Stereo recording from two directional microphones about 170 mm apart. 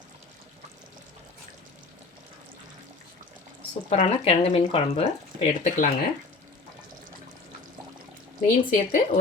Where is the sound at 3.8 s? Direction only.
35° left (ahead or behind).